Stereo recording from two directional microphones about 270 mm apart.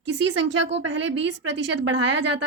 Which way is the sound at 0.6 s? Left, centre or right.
Right.